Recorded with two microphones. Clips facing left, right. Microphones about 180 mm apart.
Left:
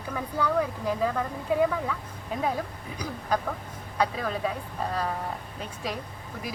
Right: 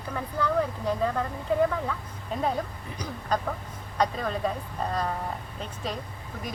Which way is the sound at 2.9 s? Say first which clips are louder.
Left 1 dB; 10° left (ahead or behind).